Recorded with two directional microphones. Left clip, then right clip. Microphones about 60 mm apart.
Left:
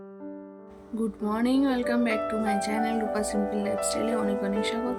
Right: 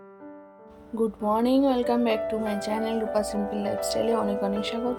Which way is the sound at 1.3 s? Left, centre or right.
Centre.